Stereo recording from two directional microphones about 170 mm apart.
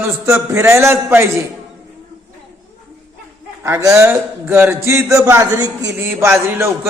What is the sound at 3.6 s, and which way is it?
Speech, 15° right (ahead or behind).